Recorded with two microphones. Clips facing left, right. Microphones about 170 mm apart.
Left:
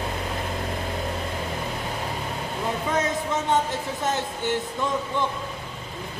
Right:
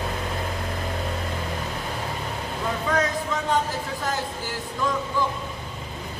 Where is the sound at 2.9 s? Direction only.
20° left (ahead or behind).